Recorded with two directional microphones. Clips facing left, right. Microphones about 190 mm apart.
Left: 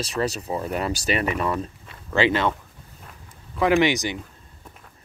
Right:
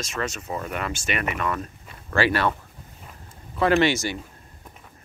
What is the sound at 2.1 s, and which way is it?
Speech, 20° left (ahead or behind).